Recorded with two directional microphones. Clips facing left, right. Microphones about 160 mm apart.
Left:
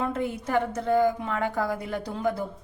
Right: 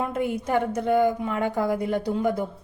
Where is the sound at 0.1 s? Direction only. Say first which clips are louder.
Right 2 dB; 15° right (ahead or behind).